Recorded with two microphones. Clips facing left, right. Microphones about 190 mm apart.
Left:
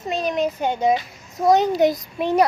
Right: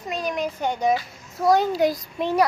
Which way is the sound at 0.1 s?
25° left (ahead or behind).